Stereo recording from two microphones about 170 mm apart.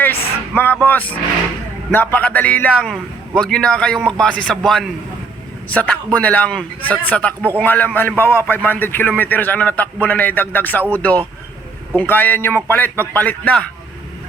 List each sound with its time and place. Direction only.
0.0 s a man's voice: 10° left (ahead or behind)